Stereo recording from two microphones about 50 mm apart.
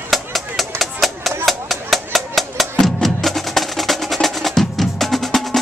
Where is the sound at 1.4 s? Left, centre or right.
Centre.